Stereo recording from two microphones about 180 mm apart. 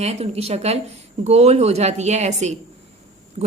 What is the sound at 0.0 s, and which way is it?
A woman's voice, 35° right (ahead or behind).